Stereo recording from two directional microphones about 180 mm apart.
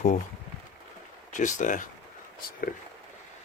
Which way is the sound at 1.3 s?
45° left (ahead or behind).